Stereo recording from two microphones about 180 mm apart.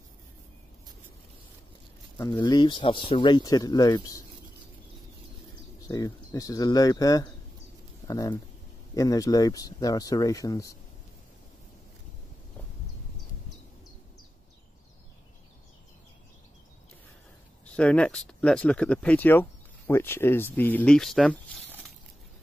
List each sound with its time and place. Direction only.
2.4 s speech: 25° left (ahead or behind)
5.8 s speech: 20° left (ahead or behind)
17.6 s speech: 5° left (ahead or behind)